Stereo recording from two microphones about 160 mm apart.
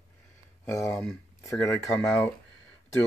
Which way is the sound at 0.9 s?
5° left (ahead or behind).